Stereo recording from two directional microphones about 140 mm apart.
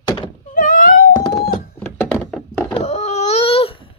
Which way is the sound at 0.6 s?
75° left (ahead or behind).